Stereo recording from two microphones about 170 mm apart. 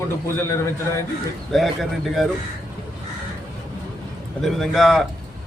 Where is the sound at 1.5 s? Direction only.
Centre (ahead or behind).